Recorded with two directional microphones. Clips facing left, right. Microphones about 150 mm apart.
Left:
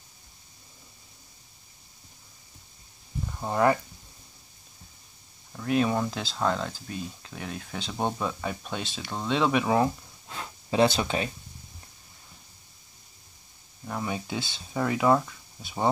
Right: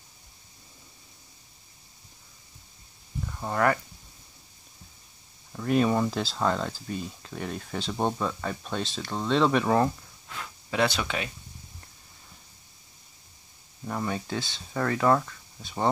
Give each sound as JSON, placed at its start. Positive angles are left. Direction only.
{"t": 3.3, "sound": "speech", "side_deg": 15}
{"t": 5.5, "sound": "speech", "side_deg": 0}
{"t": 10.2, "sound": "speech", "side_deg": 30}
{"t": 13.8, "sound": "speech", "side_deg": 0}
{"t": 14.1, "sound": "speech", "side_deg": 10}